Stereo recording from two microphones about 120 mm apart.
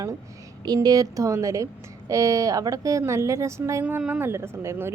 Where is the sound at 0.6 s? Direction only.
35° right (ahead or behind).